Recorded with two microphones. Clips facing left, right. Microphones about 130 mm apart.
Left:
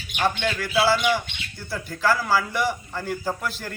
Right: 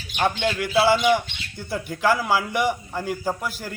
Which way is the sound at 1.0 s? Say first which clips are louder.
Right 3 dB; 20° right (ahead or behind).